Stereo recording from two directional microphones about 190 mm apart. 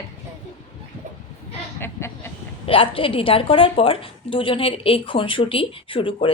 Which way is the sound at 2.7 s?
30° left (ahead or behind).